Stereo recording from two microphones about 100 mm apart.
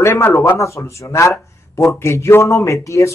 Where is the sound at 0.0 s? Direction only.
25° left (ahead or behind).